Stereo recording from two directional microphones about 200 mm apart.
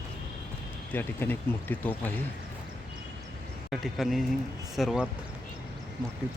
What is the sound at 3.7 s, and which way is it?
Speech, centre (ahead or behind).